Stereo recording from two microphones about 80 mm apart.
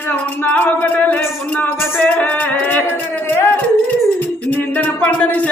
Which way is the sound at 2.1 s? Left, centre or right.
Centre.